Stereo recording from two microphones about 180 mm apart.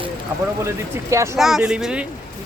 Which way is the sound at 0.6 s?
15° right (ahead or behind).